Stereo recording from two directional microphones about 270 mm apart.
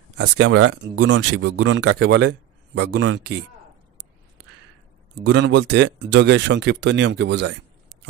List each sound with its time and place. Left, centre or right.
0.2 s speech: right
5.2 s speech: right